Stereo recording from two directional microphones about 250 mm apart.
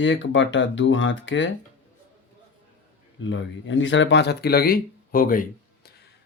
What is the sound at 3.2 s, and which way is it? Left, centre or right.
Speech, left.